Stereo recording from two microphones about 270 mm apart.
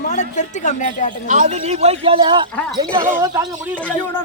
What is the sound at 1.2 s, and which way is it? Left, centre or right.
A man's voice, right.